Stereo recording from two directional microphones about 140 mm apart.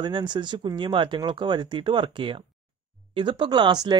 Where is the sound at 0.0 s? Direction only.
35° right (ahead or behind).